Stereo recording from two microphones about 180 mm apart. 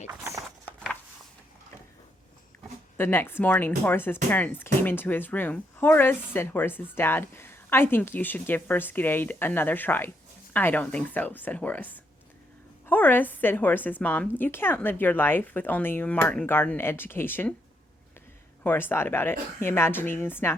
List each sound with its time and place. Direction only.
0.1 s clip-clop: 20° right (ahead or behind)
0.4 s a sound: centre (ahead or behind)
3.0 s speech: 10° left (ahead or behind)
18.6 s speech: 10° left (ahead or behind)